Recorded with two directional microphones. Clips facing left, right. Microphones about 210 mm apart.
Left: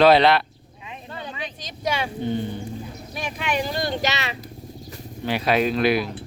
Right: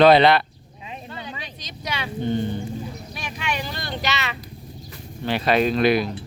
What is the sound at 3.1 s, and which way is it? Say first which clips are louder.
Speech: left 5 dB; 50° left (ahead or behind).